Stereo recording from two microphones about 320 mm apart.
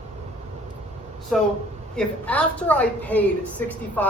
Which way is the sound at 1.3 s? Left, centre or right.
Centre.